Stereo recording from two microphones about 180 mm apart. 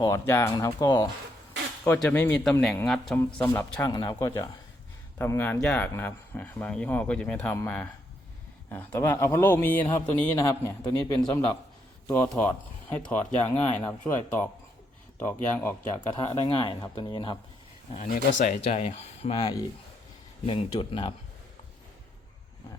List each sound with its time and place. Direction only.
0.0 s speech: 15° left (ahead or behind)
1.8 s a man's voice: 10° left (ahead or behind)
3.8 s a man's voice: 20° left (ahead or behind)
16.2 s speech: 25° left (ahead or behind)
17.9 s speech: 45° left (ahead or behind)